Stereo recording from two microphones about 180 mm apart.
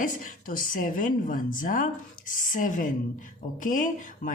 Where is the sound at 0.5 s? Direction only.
50° left (ahead or behind).